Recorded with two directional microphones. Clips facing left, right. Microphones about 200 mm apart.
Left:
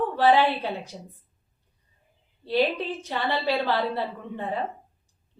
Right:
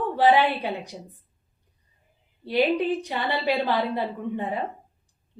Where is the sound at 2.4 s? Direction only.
15° right (ahead or behind).